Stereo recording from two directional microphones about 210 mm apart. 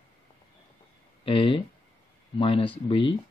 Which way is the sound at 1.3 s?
25° left (ahead or behind).